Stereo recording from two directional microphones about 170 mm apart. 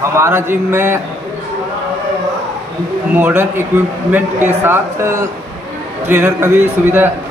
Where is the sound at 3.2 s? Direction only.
15° right (ahead or behind).